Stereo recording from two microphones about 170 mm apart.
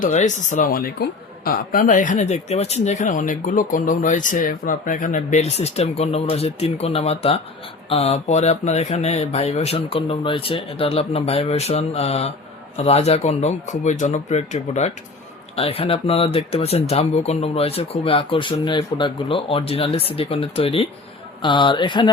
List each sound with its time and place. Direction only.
0.0 s speech: 45° left (ahead or behind); by 22.1 s 25° left (ahead or behind)